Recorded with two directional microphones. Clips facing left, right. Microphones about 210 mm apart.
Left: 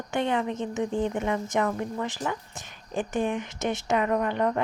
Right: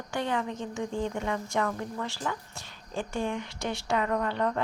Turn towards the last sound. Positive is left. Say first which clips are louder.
# left 3 dB
turn(degrees=15)  # may be behind; listen again after turning